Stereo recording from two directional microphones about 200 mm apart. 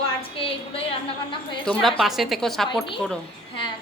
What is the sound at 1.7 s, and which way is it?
A woman's voice, 5° left (ahead or behind).